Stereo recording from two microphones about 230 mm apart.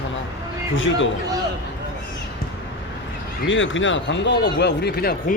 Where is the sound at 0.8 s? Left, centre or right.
Left.